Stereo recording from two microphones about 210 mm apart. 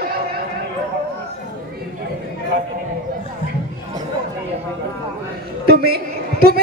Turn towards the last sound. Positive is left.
turn(degrees=-50)  # may be behind; listen again after turning